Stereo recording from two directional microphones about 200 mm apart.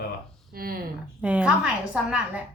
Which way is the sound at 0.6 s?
50° right (ahead or behind).